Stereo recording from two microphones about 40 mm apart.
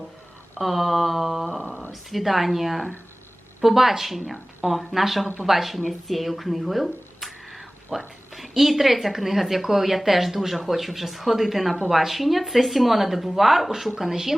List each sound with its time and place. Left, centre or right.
0.6 s speech: centre